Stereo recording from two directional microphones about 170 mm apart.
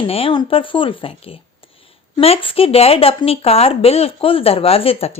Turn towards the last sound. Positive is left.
turn(degrees=35)  # may be behind; listen again after turning